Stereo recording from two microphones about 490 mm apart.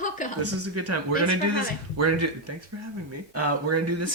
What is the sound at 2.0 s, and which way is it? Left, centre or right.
Speech, right.